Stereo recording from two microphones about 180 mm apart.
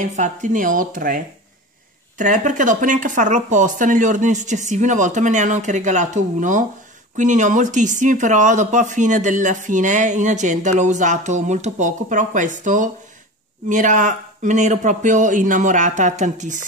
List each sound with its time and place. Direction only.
0.0 s speech: 45° right (ahead or behind)